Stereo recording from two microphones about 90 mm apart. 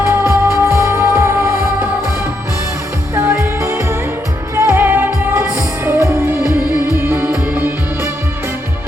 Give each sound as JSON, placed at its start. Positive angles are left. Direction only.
{"t": 0.0, "sound": "music", "side_deg": -30}
{"t": 3.2, "sound": "music", "side_deg": -30}